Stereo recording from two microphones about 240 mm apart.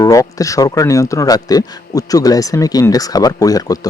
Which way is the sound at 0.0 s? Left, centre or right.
Centre.